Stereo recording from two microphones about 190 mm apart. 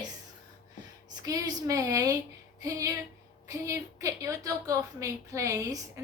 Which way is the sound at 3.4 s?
15° right (ahead or behind).